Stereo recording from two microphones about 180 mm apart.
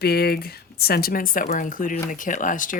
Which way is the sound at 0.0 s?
60° left (ahead or behind).